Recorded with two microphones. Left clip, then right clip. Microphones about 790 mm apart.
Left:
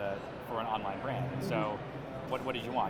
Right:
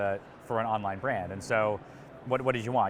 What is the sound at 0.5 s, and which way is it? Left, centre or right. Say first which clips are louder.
Speech: right 6 dB; right.